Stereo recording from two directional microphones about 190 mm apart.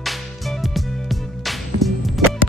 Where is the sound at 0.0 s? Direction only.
Centre (ahead or behind).